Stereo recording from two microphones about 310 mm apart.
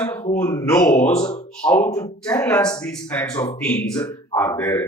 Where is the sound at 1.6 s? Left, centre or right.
Centre.